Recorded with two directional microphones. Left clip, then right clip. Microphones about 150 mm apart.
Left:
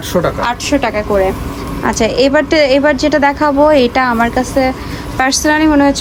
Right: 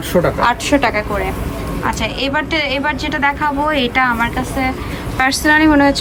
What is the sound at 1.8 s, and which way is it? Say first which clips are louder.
A woman's voice: left 8 dB; 50° left (ahead or behind).